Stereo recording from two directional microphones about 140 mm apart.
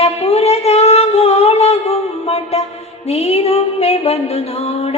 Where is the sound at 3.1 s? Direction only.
50° left (ahead or behind).